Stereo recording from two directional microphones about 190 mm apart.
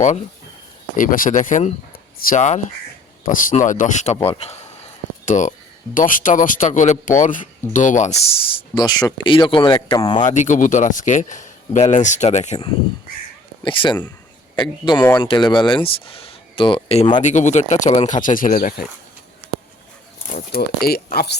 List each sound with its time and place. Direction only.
0.9 s a man's voice: 45° left (ahead or behind); by 10.2 s 25° left (ahead or behind)
10.2 s a man's voice: 40° left (ahead or behind)
13.7 s speech: 25° left (ahead or behind)
17.2 s a man's voice: 40° left (ahead or behind)
20.3 s speech: 55° left (ahead or behind)